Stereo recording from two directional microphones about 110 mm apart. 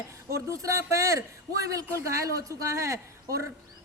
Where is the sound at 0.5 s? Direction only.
30° right (ahead or behind).